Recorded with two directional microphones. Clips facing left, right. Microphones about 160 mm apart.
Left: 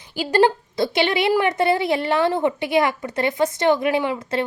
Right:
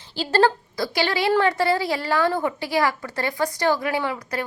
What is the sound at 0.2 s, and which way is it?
A woman's voice, 15° left (ahead or behind).